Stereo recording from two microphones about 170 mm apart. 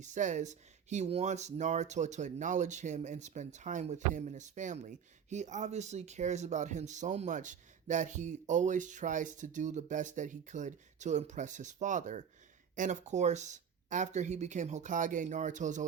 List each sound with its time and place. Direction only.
0.0 s speech: 45° right (ahead or behind)